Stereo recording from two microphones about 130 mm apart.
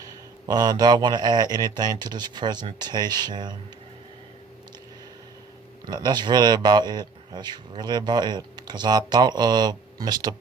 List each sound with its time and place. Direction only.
0.0 s a man's voice: 30° right (ahead or behind)
5.8 s a man's voice: 30° right (ahead or behind)